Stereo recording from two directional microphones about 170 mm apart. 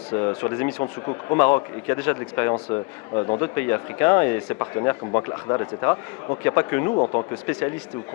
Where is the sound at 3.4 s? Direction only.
10° left (ahead or behind).